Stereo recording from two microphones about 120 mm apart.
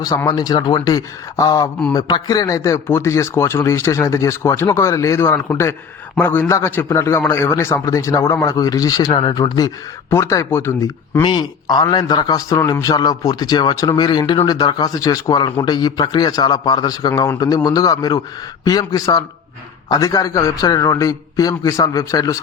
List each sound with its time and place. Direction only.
0.3 s a man's voice: 35° left (ahead or behind)
10.1 s a man's voice: 25° left (ahead or behind)
11.2 s a man's voice: 40° left (ahead or behind)